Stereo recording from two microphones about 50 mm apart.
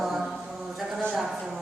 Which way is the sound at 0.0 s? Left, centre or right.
Centre.